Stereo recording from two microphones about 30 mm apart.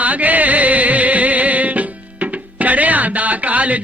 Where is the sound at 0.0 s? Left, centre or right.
Right.